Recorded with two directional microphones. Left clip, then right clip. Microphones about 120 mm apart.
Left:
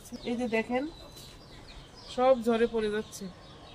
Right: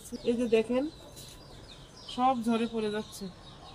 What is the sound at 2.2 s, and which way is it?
Speech, 30° left (ahead or behind).